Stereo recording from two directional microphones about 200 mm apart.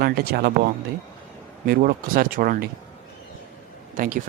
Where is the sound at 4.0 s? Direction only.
45° right (ahead or behind).